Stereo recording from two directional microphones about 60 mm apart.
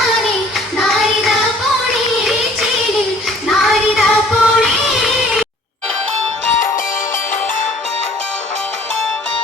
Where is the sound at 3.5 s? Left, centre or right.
Centre.